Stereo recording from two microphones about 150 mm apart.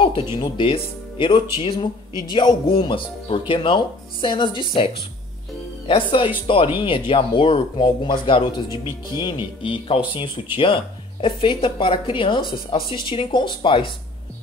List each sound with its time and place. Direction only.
0.4 s speech: 35° left (ahead or behind)